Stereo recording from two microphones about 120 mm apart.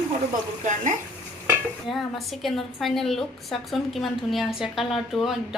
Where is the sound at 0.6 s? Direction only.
90° right.